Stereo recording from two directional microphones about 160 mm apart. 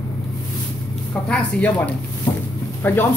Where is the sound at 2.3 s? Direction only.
25° left (ahead or behind).